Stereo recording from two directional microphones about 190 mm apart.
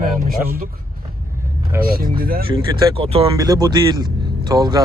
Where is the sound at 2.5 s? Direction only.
30° right (ahead or behind).